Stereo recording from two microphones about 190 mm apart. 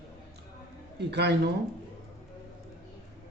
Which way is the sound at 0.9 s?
60° right (ahead or behind).